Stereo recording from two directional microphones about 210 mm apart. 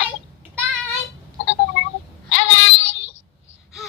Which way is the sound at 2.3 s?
65° left (ahead or behind).